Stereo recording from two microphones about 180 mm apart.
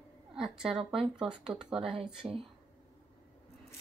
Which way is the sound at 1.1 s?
5° right (ahead or behind).